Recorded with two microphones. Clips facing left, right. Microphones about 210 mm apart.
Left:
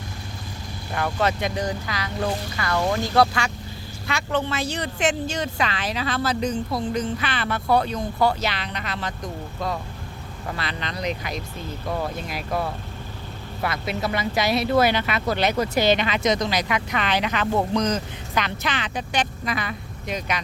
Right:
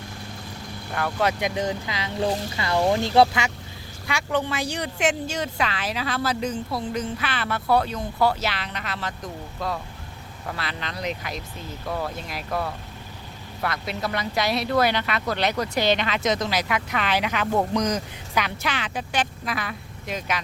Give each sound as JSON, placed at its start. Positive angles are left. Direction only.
{"t": 1.2, "sound": "speech", "side_deg": -15}
{"t": 4.0, "sound": "speech", "side_deg": -10}
{"t": 10.6, "sound": "speech", "side_deg": -5}